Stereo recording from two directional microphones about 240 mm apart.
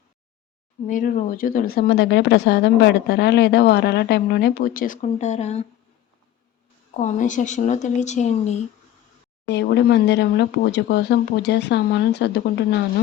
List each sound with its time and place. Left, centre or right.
0.9 s speech: left
6.9 s speech: left
9.5 s speech: left